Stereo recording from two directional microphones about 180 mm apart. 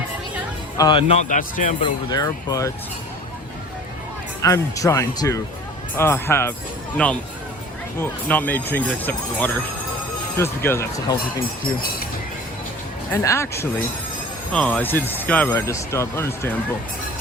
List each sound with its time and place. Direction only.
0.8 s speech: 25° left (ahead or behind)
1.4 s speech: 50° left (ahead or behind)
1.8 s speech: 20° left (ahead or behind)
4.4 s speech: 15° left (ahead or behind)
13.2 s speech: 15° left (ahead or behind)